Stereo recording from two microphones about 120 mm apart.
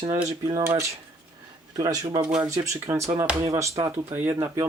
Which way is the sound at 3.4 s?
25° right (ahead or behind).